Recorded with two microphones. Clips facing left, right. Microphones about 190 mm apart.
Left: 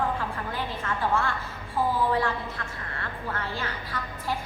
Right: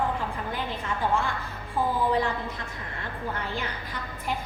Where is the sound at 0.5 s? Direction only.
15° right (ahead or behind).